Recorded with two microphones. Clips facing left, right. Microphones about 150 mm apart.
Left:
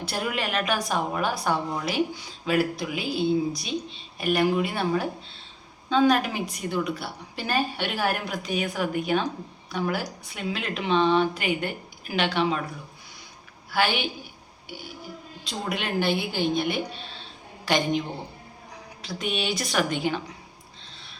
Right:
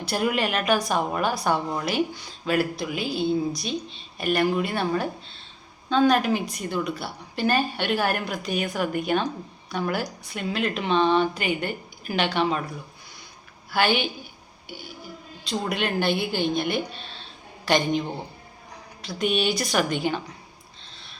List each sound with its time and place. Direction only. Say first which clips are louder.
0.1 s a woman's voice: right 5 dB; centre (ahead or behind)
13.7 s a woman's voice: right 2 dB; centre (ahead or behind)
15.4 s a woman's voice: right 4 dB; 5° left (ahead or behind)
19.0 s a woman's voice: right 5 dB; centre (ahead or behind)